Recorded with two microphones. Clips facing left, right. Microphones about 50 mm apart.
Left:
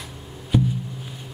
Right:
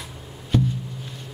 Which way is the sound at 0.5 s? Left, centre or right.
Centre.